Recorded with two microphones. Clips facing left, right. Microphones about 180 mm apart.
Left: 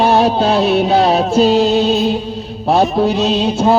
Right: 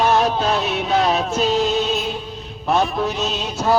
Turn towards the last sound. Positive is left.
turn(degrees=30)  # may be behind; listen again after turning